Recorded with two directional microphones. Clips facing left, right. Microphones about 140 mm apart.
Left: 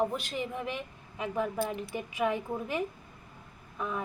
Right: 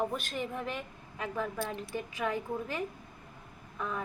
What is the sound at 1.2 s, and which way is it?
A woman's voice, 15° left (ahead or behind).